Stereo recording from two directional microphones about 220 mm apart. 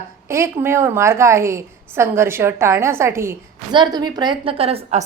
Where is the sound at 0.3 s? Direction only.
10° right (ahead or behind).